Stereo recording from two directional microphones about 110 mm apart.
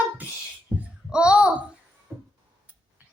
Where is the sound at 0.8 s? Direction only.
10° right (ahead or behind).